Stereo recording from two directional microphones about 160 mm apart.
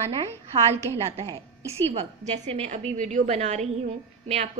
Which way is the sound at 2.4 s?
40° right (ahead or behind).